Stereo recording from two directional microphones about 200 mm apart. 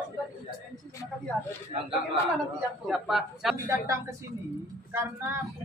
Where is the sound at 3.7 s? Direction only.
15° right (ahead or behind).